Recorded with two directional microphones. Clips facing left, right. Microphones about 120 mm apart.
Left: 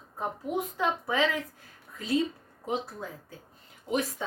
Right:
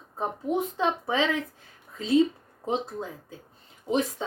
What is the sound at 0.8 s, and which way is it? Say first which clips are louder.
A woman's voice: left 2 dB; 25° right (ahead or behind).